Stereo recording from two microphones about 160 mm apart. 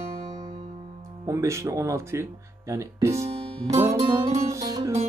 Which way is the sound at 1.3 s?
20° right (ahead or behind).